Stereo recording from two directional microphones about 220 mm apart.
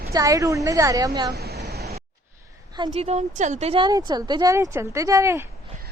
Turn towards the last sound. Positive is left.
turn(degrees=-15)  # may be behind; listen again after turning